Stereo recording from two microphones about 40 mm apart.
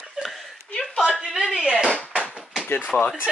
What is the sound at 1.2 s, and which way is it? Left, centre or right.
Speech, centre.